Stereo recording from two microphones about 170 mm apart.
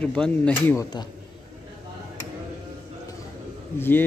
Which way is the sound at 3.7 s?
15° left (ahead or behind).